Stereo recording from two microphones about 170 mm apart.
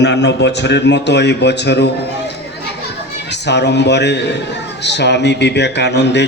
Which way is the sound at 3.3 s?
90° left.